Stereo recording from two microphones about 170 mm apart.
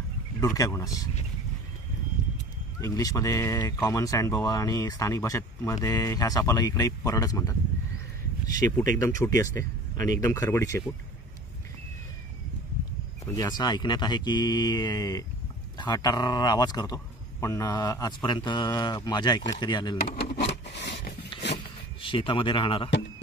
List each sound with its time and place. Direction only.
0.4 s speech: 20° left (ahead or behind)
2.8 s speech: 20° left (ahead or behind)
8.5 s speech: 20° left (ahead or behind)
13.2 s speech: 20° left (ahead or behind)
20.0 s speech: 60° left (ahead or behind)
20.6 s scrape: 90° left
21.3 s a sound: 30° left (ahead or behind)
22.0 s speech: 30° left (ahead or behind)